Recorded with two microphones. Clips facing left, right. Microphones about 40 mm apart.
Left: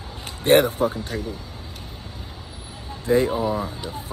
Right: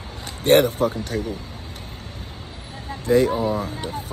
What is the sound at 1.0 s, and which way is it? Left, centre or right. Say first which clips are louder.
Speech: right 3 dB; right.